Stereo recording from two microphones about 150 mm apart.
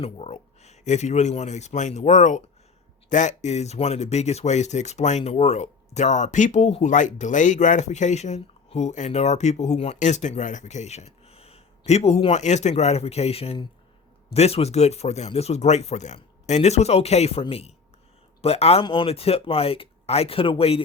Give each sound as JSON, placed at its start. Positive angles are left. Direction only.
{"t": 0.0, "sound": "speech", "side_deg": 45}